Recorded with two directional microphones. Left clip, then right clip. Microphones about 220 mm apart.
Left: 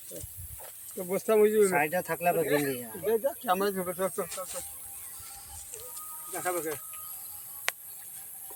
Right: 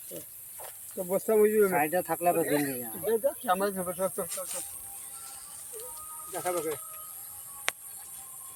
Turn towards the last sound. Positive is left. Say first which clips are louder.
# even
turn(degrees=5)  # may be behind; listen again after turning